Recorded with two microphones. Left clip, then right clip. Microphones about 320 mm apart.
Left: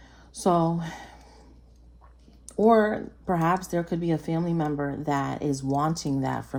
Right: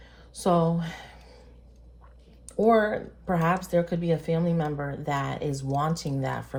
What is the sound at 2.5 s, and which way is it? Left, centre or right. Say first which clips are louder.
Speech: left 1 dB; left.